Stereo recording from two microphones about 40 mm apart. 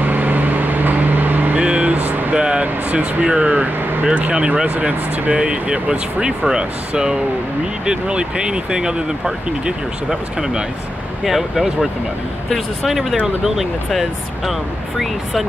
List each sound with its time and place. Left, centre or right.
0.0 s vehicle: right
1.6 s vehicle: right
2.6 s speech: right
4.0 s speech: right
4.3 s speech: right
4.6 s speech: right
5.3 s speech: right
7.8 s speech: right
11.2 s speech: centre